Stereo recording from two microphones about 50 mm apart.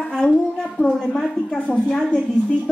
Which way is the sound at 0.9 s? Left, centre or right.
Centre.